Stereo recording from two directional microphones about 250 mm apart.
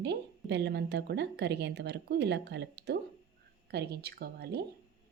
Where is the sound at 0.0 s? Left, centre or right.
Right.